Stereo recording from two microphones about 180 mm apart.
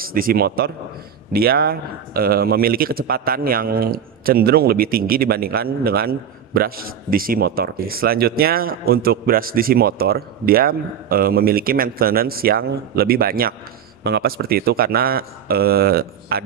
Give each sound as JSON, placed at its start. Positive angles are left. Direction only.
{"t": 0.0, "sound": "speech", "side_deg": -55}